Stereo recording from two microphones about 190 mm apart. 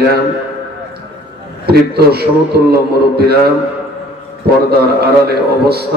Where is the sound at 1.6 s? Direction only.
55° right (ahead or behind).